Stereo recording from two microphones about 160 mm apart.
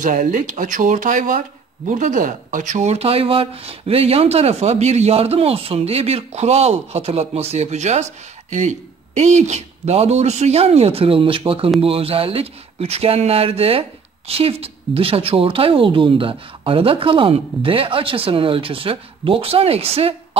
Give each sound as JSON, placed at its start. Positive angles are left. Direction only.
{"t": 0.0, "sound": "speech", "side_deg": -55}